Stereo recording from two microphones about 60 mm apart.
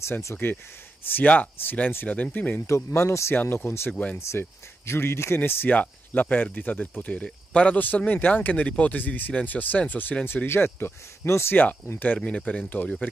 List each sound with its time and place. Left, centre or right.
0.4 s speech: left
2.0 s speech: left
2.6 s speech: left
3.3 s speech: left
5.7 s speech: left
12.2 s speech: centre